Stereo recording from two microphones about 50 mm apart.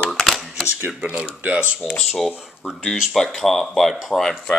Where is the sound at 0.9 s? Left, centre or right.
Right.